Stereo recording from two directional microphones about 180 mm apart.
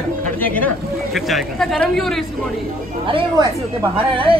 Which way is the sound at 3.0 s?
30° right (ahead or behind).